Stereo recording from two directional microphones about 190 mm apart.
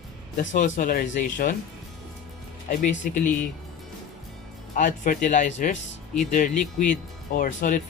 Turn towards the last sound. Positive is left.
turn(degrees=45)  # may be behind; listen again after turning